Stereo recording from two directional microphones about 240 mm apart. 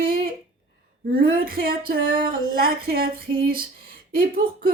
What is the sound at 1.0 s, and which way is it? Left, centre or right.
Speech, right.